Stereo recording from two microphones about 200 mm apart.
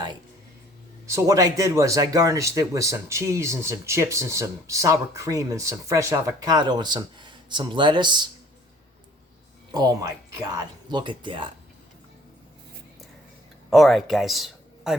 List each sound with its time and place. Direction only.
1.0 s speech: 15° right (ahead or behind)
9.7 s speech: 20° right (ahead or behind)
13.7 s a man's voice: centre (ahead or behind)